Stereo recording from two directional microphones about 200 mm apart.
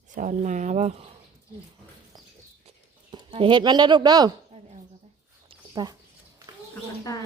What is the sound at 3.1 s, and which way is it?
Speech, 25° right (ahead or behind).